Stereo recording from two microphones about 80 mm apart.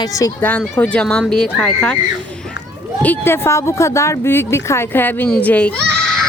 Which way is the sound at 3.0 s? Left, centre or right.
Left.